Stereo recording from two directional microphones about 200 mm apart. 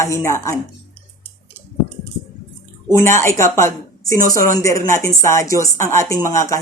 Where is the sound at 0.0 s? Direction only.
15° left (ahead or behind).